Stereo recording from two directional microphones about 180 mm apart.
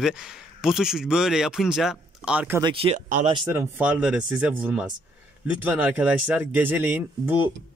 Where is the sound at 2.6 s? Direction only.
30° right (ahead or behind).